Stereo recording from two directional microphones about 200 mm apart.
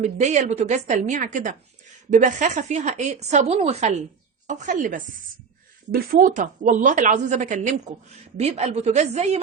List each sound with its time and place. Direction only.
0.0 s speech: 35° right (ahead or behind)